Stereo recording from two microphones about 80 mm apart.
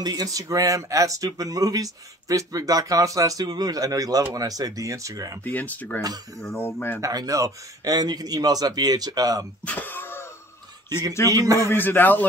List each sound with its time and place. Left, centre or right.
0.0 s speech: right
5.4 s speech: left
7.0 s speech: right
9.7 s cough: left
11.2 s speech: right
11.7 s speech: left